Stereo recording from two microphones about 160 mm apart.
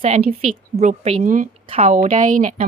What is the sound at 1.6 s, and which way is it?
Speech, 40° right (ahead or behind).